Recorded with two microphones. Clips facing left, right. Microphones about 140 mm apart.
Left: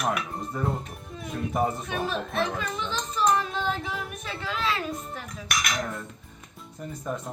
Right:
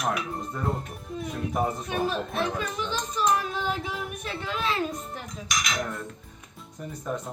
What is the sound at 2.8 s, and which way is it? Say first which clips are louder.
Child singing: left 1 dB; 10° right (ahead or behind).